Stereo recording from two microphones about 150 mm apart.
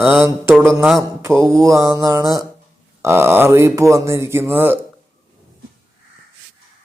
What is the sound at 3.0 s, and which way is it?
Speech, 15° right (ahead or behind).